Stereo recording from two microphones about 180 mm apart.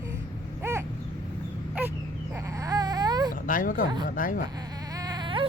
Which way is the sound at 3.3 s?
50° left (ahead or behind).